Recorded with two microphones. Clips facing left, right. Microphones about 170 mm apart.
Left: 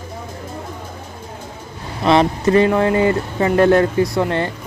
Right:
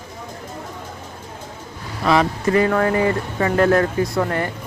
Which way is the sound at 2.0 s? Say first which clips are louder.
Left 3 dB; 30° left (ahead or behind).